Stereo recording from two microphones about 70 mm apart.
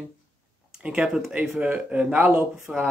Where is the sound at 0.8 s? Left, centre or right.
Centre.